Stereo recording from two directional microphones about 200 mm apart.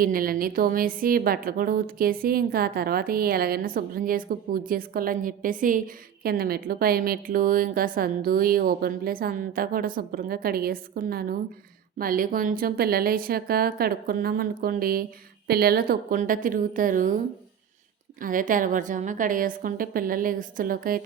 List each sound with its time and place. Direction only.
0.0 s a woman's voice: 45° right (ahead or behind)
18.2 s a woman's voice: 40° right (ahead or behind)